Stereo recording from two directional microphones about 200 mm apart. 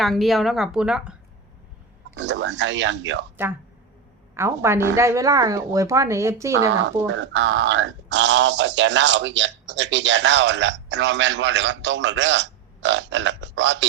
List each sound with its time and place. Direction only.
0.0 s speech: centre (ahead or behind)
2.1 s speech: 65° right (ahead or behind)
4.4 s speech: 15° right (ahead or behind)
6.6 s speech: 70° right (ahead or behind)